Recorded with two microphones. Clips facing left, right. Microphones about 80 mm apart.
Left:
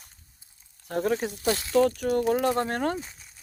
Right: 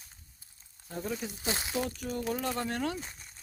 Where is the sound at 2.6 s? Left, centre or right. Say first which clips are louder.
Left 6 dB; left.